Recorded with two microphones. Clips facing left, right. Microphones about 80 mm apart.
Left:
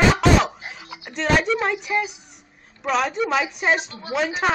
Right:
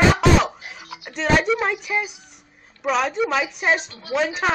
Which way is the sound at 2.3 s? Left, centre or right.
Centre.